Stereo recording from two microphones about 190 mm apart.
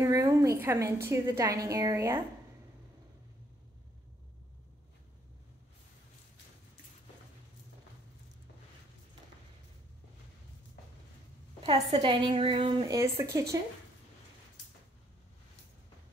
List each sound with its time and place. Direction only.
0.0 s a sound: 15° right (ahead or behind)
1.0 s a woman's voice: 15° right (ahead or behind)
11.6 s a woman's voice: 30° right (ahead or behind)